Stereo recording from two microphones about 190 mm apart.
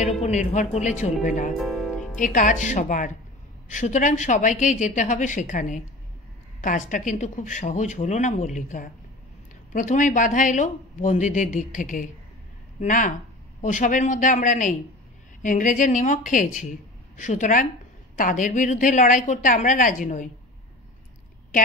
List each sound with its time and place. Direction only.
0.0 s speech: 40° left (ahead or behind)
1.6 s music: centre (ahead or behind)
2.1 s speech: 45° left (ahead or behind)